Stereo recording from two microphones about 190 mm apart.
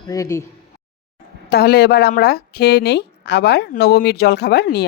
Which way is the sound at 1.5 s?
55° left (ahead or behind).